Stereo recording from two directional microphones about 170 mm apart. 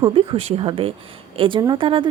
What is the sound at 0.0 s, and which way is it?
A woman's voice, 30° right (ahead or behind).